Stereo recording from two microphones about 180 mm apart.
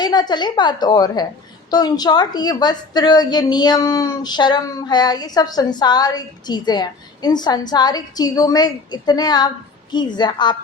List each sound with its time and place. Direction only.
0.0 s a woman's voice: 25° left (ahead or behind)